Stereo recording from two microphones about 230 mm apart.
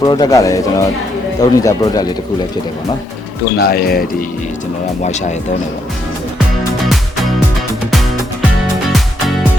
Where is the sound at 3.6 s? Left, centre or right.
Left.